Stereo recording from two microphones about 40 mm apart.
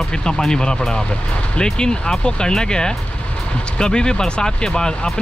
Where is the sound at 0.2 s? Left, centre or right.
Centre.